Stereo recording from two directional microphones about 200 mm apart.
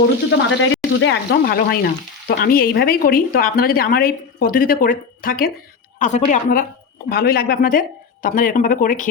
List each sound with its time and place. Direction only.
0.3 s a woman's voice: 65° left (ahead or behind); by 9.0 s 40° left (ahead or behind)